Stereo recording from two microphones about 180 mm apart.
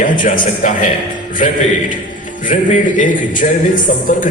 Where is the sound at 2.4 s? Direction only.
45° left (ahead or behind).